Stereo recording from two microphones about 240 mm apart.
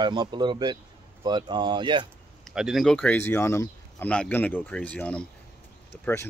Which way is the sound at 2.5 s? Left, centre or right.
Centre.